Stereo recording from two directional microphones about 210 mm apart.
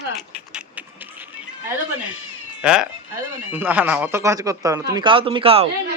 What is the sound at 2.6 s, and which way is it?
Speech, 5° right (ahead or behind).